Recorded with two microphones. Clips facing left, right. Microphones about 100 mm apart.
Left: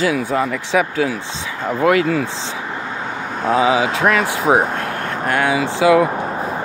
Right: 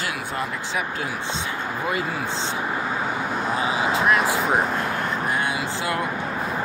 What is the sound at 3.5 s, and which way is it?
Speech, 90° left.